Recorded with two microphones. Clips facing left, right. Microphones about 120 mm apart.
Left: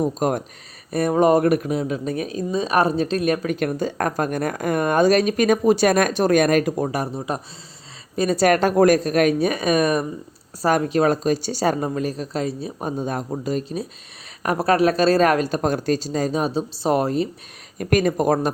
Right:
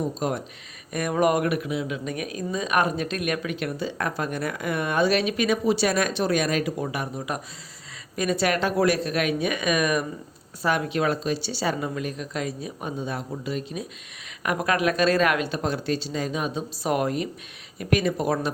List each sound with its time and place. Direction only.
0.0 s speech: 50° left (ahead or behind)
0.9 s speech: 30° left (ahead or behind)
17.7 s speech: 45° left (ahead or behind)